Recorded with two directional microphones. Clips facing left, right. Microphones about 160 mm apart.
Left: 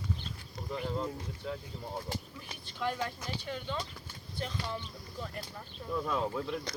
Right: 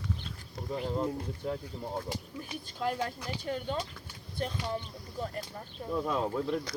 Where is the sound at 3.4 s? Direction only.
45° right (ahead or behind).